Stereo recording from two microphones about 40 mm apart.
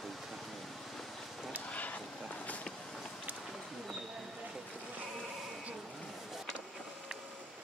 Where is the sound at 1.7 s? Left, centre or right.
Left.